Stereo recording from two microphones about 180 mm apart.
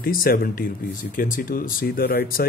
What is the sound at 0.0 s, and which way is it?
Speech, 55° left (ahead or behind).